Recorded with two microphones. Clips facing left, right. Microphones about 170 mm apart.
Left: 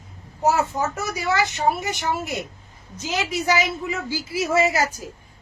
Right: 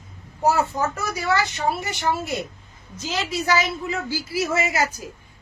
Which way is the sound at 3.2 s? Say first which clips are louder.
Even; 15° left (ahead or behind).